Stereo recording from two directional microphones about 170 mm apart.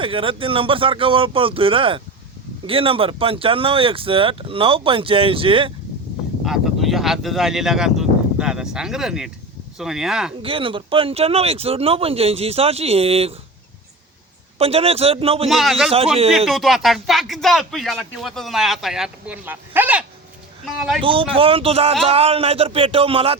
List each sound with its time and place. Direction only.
0.0 s speech: 30° right (ahead or behind)
6.4 s speech: centre (ahead or behind)
10.4 s speech: 30° right (ahead or behind)
14.6 s speech: 35° right (ahead or behind)
15.4 s speech: centre (ahead or behind)
21.0 s speech: 30° right (ahead or behind)